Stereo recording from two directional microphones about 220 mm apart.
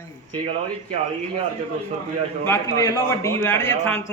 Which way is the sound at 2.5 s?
10° left (ahead or behind).